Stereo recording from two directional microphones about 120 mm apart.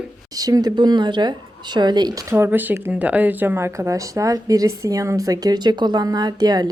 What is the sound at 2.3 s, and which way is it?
Speech, 15° right (ahead or behind).